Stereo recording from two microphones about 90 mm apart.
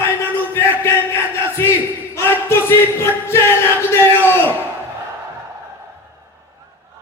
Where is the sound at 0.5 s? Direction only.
30° left (ahead or behind).